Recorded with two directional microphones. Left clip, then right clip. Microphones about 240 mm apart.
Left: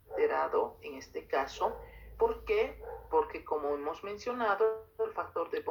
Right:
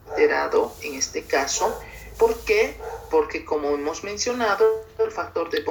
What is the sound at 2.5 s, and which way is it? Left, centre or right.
Speech, right.